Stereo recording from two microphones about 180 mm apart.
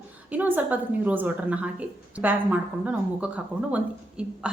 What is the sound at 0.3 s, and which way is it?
A woman's voice, 10° right (ahead or behind).